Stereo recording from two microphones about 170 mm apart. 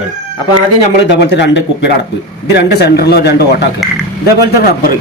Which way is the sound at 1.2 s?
90° left.